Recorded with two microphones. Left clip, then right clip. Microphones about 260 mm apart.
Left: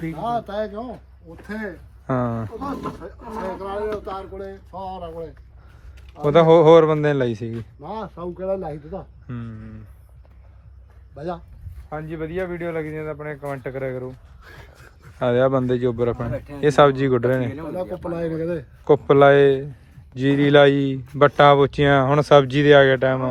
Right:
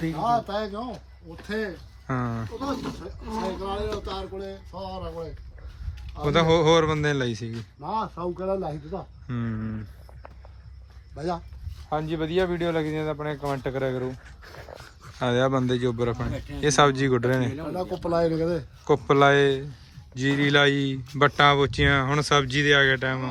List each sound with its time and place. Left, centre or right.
0.2 s speech: centre
2.0 s speech: centre
6.2 s speech: centre
7.8 s speech: centre
11.1 s speech: centre
15.2 s speech: centre
17.7 s speech: centre
18.9 s speech: centre